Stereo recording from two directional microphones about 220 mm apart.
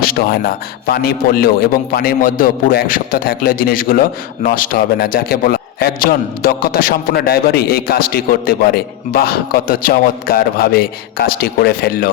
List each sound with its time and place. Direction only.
0.0 s a man's voice: 40° left (ahead or behind)